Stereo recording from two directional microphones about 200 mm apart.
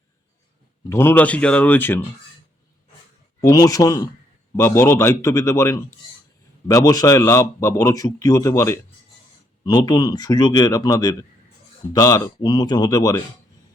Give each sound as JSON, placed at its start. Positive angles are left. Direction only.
{"t": 0.9, "sound": "a man's voice", "side_deg": 10}
{"t": 3.4, "sound": "a man's voice", "side_deg": 15}